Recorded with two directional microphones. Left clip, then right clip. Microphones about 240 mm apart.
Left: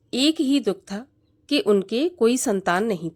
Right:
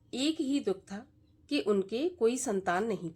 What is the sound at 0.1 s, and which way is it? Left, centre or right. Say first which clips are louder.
A woman's voice: left 11 dB; left.